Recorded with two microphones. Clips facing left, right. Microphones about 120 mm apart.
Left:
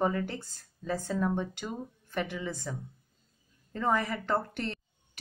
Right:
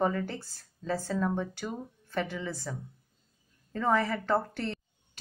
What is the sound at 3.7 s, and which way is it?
Speech, 15° left (ahead or behind).